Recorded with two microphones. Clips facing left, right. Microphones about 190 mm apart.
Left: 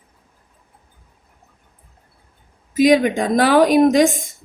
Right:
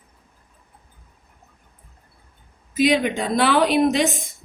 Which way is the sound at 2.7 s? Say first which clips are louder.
Left 5 dB; 45° left (ahead or behind).